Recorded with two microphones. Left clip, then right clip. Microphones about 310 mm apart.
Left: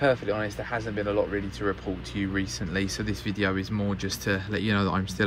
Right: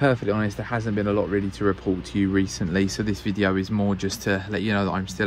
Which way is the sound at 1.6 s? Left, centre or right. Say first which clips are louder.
Right 5 dB; right.